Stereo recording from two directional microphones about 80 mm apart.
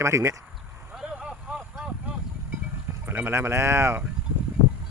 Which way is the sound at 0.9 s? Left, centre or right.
Centre.